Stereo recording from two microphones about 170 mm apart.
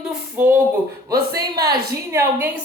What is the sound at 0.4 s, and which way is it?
Speech, 10° right (ahead or behind).